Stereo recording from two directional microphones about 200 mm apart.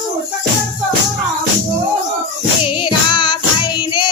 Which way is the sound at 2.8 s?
25° left (ahead or behind).